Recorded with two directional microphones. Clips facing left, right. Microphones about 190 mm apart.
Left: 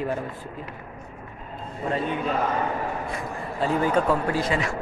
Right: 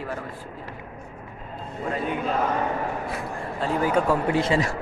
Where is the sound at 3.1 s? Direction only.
5° right (ahead or behind).